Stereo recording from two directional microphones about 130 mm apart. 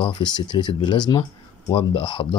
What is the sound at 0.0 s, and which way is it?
Speech, 35° left (ahead or behind).